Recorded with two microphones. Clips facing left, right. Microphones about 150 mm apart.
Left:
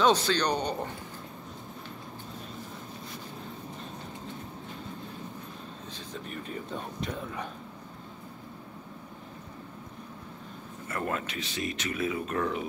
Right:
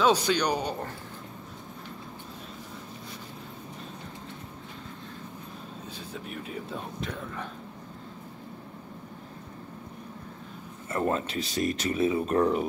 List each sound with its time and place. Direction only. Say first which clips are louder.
0.0 s speech: right 1 dB; 10° right (ahead or behind)
6.1 s speech: even; 5° right (ahead or behind)
10.9 s speech: right 5 dB; 25° right (ahead or behind)